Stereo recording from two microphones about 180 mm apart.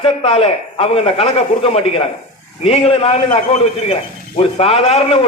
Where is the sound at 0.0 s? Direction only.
30° left (ahead or behind).